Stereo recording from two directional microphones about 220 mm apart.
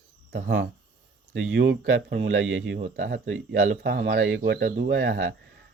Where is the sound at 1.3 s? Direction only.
55° right (ahead or behind).